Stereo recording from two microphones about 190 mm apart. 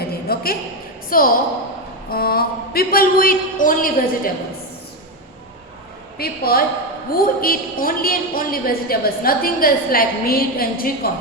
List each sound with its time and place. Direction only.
0.1 s a sound: 55° left (ahead or behind)
1.1 s a woman's voice: 45° left (ahead or behind)
6.1 s a woman's voice: 55° left (ahead or behind)